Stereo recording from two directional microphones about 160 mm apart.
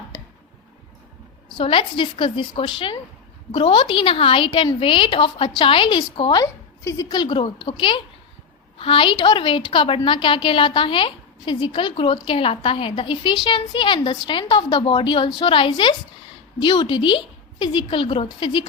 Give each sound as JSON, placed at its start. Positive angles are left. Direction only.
{"t": 1.5, "sound": "a woman's voice", "side_deg": 30}